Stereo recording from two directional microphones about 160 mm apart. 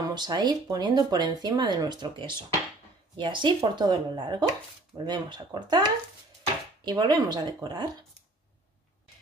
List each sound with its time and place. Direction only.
0.0 s speech: 25° right (ahead or behind)